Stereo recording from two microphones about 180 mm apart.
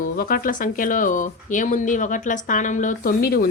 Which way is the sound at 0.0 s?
50° left (ahead or behind).